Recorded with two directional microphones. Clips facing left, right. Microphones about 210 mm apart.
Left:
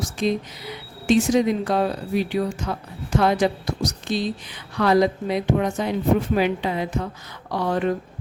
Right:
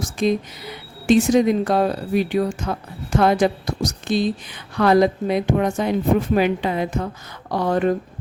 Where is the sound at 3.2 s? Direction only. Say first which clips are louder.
Right 3 dB; 50° right (ahead or behind).